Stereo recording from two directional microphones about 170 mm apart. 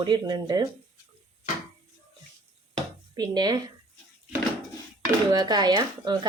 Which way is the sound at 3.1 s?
25° right (ahead or behind).